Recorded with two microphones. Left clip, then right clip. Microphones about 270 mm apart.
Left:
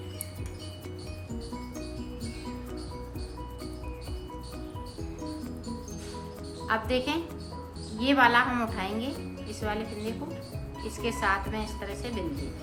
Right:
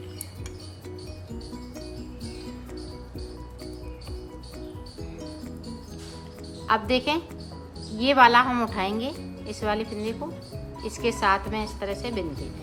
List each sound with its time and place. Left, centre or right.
6.7 s a woman's voice: centre